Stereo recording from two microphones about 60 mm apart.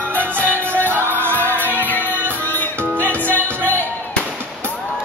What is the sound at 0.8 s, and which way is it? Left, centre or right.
Music, right.